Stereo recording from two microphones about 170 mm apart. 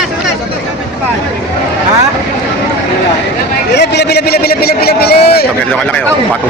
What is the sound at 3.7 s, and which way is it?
A man's voice, 80° left.